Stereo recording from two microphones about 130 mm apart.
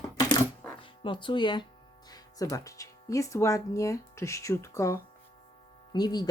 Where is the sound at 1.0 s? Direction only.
40° left (ahead or behind).